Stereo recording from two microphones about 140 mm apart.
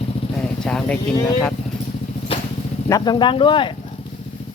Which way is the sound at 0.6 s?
5° left (ahead or behind).